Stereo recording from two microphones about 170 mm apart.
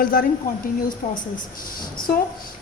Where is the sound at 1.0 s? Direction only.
45° left (ahead or behind).